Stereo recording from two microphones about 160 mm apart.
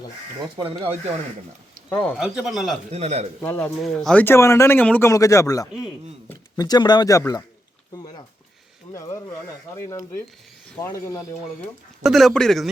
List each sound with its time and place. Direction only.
0.8 s speech: 40° right (ahead or behind)
1.9 s speech: 10° left (ahead or behind)
2.1 s speech: 5° right (ahead or behind)
2.9 s a man's voice: 40° right (ahead or behind)
3.4 s speech: 15° left (ahead or behind)
7.9 s a sound: 25° left (ahead or behind)
8.9 s speech: 20° left (ahead or behind)
12.0 s speech: centre (ahead or behind)